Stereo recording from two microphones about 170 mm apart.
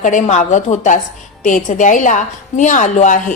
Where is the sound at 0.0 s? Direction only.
45° left (ahead or behind).